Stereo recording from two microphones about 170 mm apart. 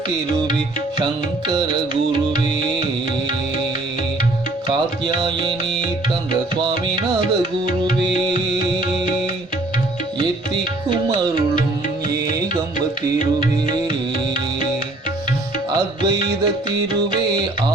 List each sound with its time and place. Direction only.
5.0 s music: 25° right (ahead or behind)
10.2 s music: 25° right (ahead or behind)
15.7 s music: 25° right (ahead or behind)